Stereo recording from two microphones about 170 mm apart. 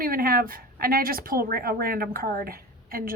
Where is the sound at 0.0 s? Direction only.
60° right (ahead or behind).